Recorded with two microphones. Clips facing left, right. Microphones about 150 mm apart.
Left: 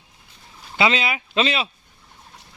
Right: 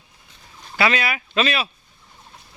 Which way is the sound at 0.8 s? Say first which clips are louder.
Even; 20° left (ahead or behind).